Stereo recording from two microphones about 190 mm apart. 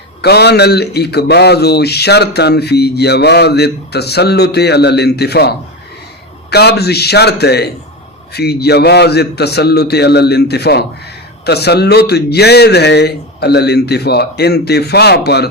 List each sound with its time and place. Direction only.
0.2 s a man's voice: 60° left (ahead or behind)